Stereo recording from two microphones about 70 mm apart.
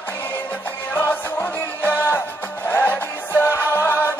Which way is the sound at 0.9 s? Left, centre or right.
Left.